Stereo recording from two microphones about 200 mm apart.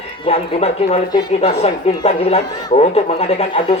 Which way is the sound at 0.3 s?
30° left (ahead or behind).